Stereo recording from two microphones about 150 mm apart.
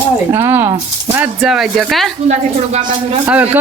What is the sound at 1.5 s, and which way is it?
Speech, centre (ahead or behind).